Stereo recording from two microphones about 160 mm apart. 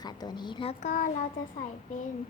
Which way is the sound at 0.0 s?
25° left (ahead or behind).